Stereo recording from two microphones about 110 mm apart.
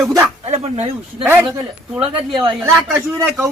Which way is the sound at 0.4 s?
75° right (ahead or behind).